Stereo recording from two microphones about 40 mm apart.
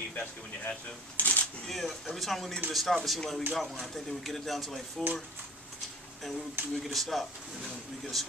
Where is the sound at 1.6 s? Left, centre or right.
Centre.